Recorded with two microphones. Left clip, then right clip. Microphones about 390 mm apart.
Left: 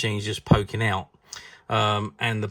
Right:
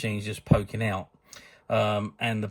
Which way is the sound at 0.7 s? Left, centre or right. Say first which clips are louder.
Left 5 dB; left.